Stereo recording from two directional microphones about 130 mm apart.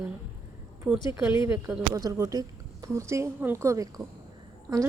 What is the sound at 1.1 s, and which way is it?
A woman's voice, 20° right (ahead or behind).